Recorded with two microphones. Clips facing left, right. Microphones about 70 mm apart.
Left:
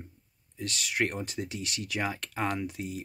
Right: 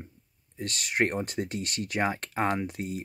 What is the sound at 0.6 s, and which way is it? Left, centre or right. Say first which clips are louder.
Speech: right 3 dB; right.